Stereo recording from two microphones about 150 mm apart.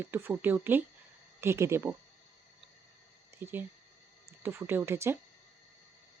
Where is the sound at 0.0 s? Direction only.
15° right (ahead or behind).